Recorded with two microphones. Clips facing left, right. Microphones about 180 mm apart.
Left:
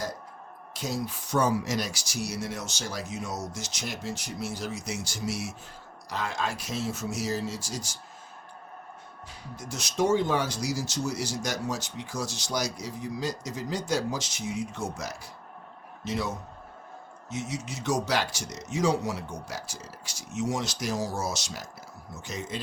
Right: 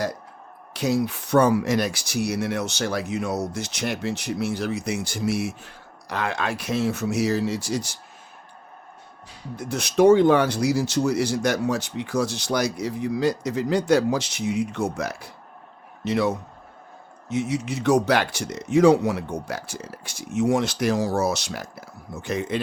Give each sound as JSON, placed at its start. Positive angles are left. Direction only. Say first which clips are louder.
{"t": 0.7, "sound": "speech", "louder": "right 9 dB", "side_deg": -65}
{"t": 9.6, "sound": "speech", "louder": "right 9 dB", "side_deg": -60}